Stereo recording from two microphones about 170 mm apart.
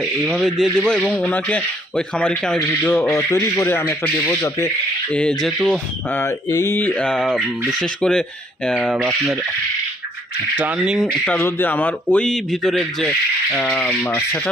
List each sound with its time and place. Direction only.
0.0 s speech: centre (ahead or behind); by 4.7 s 15° left (ahead or behind)
5.1 s speech: 5° left (ahead or behind)
10.5 s speech: 5° right (ahead or behind)
11.3 s speech: 15° left (ahead or behind)